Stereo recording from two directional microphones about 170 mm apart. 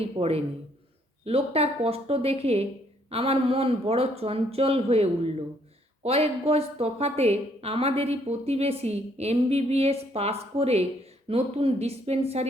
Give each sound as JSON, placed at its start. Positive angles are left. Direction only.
{"t": 0.0, "sound": "a woman's voice", "side_deg": -35}